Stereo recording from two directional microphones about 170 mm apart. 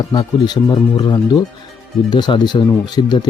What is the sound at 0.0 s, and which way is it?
Speech, 25° left (ahead or behind).